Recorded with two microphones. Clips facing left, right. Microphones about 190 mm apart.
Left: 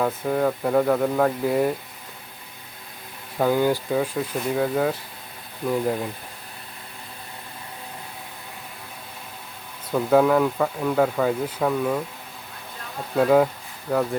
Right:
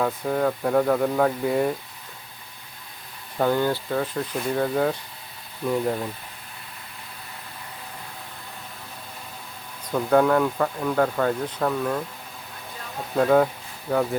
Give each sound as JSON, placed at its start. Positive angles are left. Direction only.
{"t": 0.0, "sound": "speech", "side_deg": 0}
{"t": 3.3, "sound": "speech", "side_deg": 5}
{"t": 9.9, "sound": "speech", "side_deg": 5}
{"t": 13.1, "sound": "speech", "side_deg": 5}